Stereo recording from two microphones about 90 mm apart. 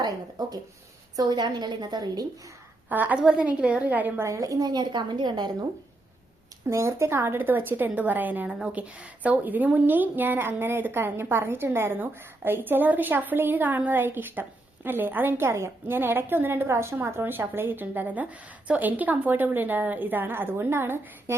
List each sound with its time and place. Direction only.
0.0 s a woman's voice: 45° right (ahead or behind)
2.9 s a woman's voice: 20° right (ahead or behind)
4.2 s a woman's voice: 35° right (ahead or behind); by 5.6 s 55° right (ahead or behind)
6.7 s a woman's voice: 30° right (ahead or behind)